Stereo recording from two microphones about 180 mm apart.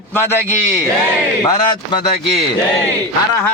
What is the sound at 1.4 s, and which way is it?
Speech, 20° left (ahead or behind).